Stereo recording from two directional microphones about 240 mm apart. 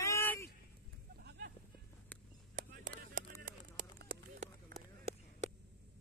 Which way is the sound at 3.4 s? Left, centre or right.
Right.